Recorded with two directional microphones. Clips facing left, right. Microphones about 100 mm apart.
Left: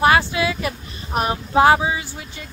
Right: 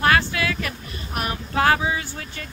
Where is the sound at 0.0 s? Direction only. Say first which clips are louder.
Left 4 dB; 20° left (ahead or behind).